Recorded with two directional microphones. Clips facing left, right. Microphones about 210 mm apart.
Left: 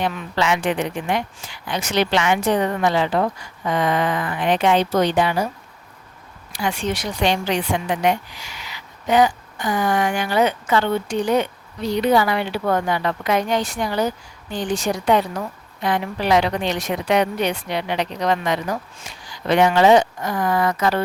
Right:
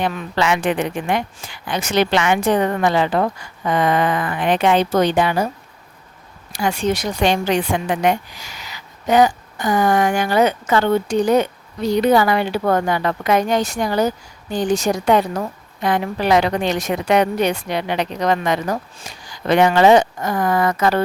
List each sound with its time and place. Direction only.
0.0 s a woman's voice: 55° right (ahead or behind)
6.5 s a woman's voice: 45° right (ahead or behind)